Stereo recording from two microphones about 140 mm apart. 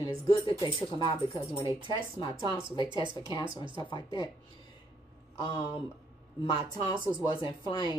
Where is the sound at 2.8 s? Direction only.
35° right (ahead or behind).